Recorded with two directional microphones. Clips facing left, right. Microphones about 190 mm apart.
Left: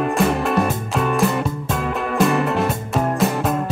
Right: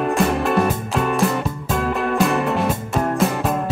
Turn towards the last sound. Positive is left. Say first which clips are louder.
# even
turn(degrees=0)  # may be behind; listen again after turning